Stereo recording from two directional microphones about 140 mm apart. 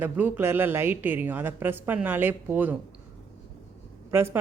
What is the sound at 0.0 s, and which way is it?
Speech, 15° right (ahead or behind).